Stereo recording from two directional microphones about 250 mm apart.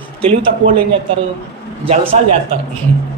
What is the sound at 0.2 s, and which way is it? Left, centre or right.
Speech, right.